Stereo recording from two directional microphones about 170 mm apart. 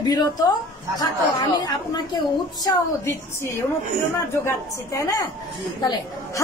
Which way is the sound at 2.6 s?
20° left (ahead or behind).